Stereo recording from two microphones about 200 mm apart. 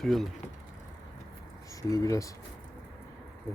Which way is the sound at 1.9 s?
15° left (ahead or behind).